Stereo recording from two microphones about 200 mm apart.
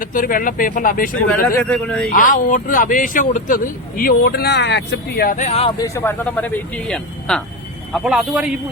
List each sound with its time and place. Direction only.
0.0 s speech: 45° left (ahead or behind)
1.5 s a man's voice: 10° left (ahead or behind)
2.1 s speech: 45° left (ahead or behind)
5.8 s a man's voice: 15° left (ahead or behind); by 8.5 s 5° right (ahead or behind)